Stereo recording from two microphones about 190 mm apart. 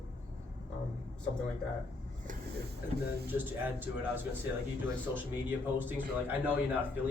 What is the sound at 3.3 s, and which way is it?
Speech, 10° right (ahead or behind).